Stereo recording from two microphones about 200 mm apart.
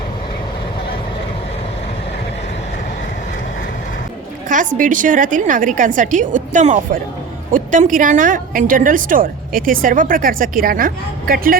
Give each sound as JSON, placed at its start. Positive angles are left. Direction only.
{"t": 4.4, "sound": "a woman's voice", "side_deg": -40}